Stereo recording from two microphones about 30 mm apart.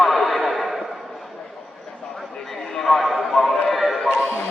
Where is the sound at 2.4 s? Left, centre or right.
Centre.